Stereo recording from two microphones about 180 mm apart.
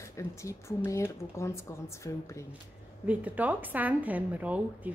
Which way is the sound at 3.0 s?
10° right (ahead or behind).